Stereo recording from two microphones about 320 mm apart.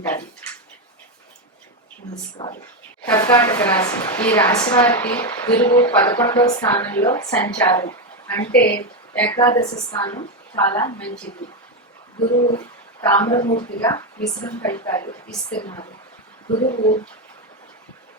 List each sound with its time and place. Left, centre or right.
0.0 s speech: centre
2.4 s speech: centre
12.2 s speech: centre